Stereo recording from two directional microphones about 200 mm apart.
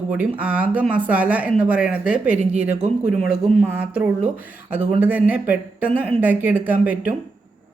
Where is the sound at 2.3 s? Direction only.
35° right (ahead or behind).